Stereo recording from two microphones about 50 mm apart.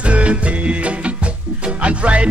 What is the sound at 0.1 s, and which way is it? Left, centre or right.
Music, right.